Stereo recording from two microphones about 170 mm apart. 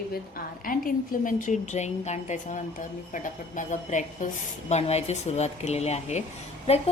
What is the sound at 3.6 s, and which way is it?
A woman's voice, 50° left (ahead or behind).